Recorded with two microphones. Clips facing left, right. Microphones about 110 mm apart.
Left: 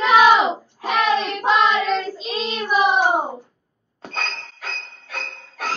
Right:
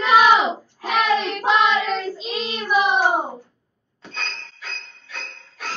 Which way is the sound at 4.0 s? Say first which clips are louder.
Left 4 dB; 45° left (ahead or behind).